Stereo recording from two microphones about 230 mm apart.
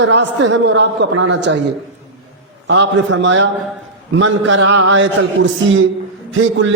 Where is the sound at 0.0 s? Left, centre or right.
Right.